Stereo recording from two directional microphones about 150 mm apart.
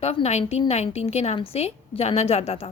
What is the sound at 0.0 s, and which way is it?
A woman's voice, 45° left (ahead or behind).